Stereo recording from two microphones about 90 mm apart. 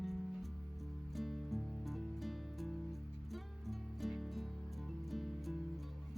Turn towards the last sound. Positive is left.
turn(degrees=0)  # may be behind; listen again after turning